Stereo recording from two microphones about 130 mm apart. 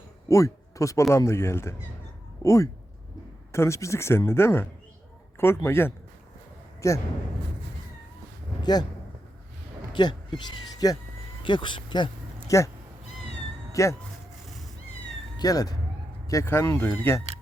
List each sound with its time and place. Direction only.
0.3 s speech: 25° left (ahead or behind)
5.6 s speech: 20° left (ahead or behind)
8.6 s speech: 30° left (ahead or behind)
9.9 s speech: 35° left (ahead or behind)
12.5 s speech: 25° left (ahead or behind)
13.8 s speech: 25° left (ahead or behind)
15.4 s speech: 30° left (ahead or behind)